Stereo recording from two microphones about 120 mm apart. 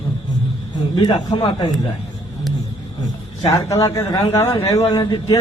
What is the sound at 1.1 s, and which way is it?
Speech, 40° left (ahead or behind).